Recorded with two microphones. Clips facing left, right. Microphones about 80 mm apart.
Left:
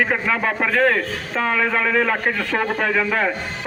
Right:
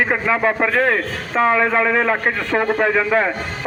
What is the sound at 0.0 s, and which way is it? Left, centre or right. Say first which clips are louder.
A man's voice: right 3 dB; centre.